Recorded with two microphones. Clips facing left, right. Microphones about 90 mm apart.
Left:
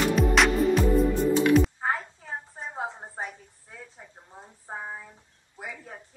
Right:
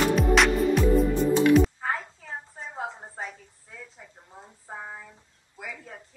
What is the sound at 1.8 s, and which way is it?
Music, 25° left (ahead or behind).